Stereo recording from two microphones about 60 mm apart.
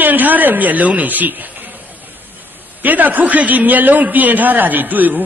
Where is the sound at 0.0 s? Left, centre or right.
Right.